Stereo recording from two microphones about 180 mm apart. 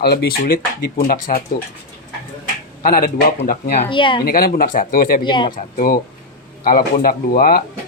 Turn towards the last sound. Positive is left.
turn(degrees=55)  # may be behind; listen again after turning